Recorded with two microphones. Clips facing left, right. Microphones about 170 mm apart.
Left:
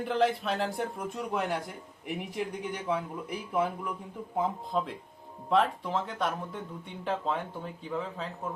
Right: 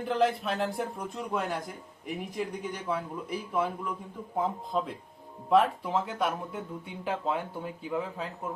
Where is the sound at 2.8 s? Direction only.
10° left (ahead or behind).